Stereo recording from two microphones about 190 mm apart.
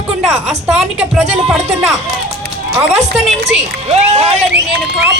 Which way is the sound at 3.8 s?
35° right (ahead or behind).